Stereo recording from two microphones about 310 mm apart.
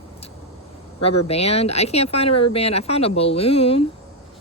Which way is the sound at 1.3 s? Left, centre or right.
Centre.